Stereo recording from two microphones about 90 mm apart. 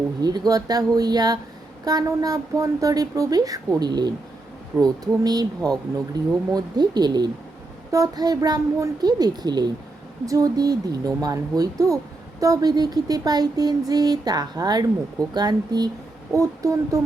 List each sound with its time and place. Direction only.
0.2 s speech: 50° right (ahead or behind)
10.2 s speech: 40° right (ahead or behind)
16.3 s a sound: 40° right (ahead or behind)